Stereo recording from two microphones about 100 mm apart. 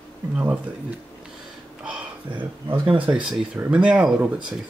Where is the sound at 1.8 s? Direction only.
15° right (ahead or behind).